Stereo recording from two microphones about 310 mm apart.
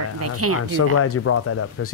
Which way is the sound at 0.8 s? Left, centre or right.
Left.